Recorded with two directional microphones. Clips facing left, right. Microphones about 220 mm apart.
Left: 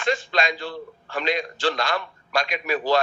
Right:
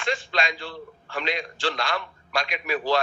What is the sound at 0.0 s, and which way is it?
A man's voice, 40° left (ahead or behind).